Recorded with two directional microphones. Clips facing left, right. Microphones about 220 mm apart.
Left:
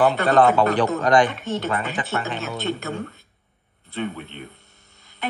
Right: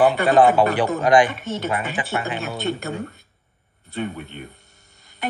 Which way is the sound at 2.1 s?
15° right (ahead or behind).